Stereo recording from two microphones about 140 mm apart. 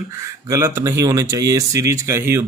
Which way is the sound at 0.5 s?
20° right (ahead or behind).